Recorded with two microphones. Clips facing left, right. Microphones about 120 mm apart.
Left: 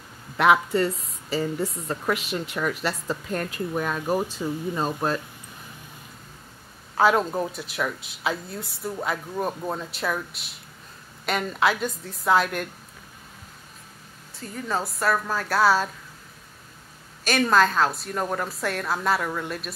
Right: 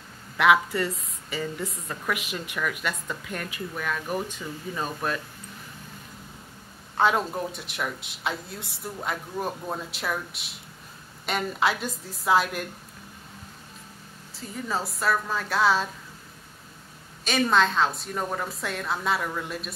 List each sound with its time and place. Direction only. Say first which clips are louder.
0.4 s a woman's voice: left 2 dB; 25° left (ahead or behind)
7.0 s speech: left 3 dB; centre (ahead or behind)
14.5 s speech: left 2 dB; centre (ahead or behind)
17.2 s speech: left 2 dB; centre (ahead or behind)